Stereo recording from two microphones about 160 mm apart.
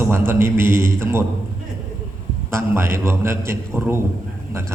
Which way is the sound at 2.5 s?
15° right (ahead or behind).